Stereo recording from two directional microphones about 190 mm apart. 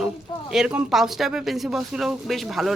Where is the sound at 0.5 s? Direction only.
5° right (ahead or behind).